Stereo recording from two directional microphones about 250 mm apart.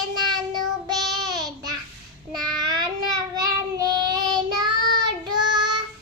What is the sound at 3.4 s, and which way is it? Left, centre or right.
Child singing, centre.